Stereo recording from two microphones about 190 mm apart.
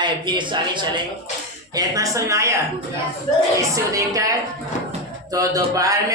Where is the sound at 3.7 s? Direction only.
15° right (ahead or behind).